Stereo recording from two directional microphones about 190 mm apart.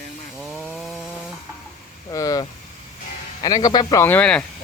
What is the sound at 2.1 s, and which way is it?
Speech, 20° left (ahead or behind).